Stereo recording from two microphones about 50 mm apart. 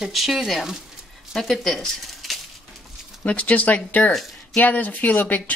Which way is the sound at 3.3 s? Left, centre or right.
Left.